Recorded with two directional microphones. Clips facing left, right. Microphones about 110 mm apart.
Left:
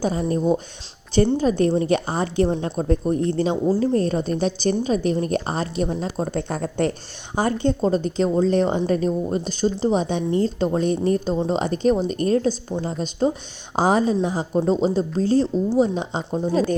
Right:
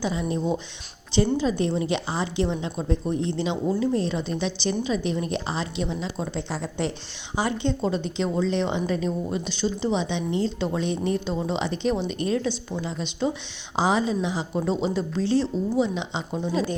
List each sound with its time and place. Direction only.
0.0 s a woman's voice: 45° left (ahead or behind)